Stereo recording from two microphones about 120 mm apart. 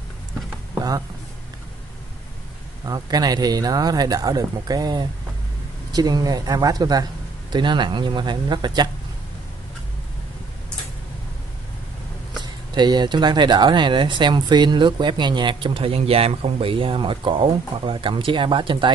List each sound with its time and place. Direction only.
0.7 s a sound: 30° right (ahead or behind)
2.8 s speech: 35° right (ahead or behind)
12.7 s speech: 40° right (ahead or behind)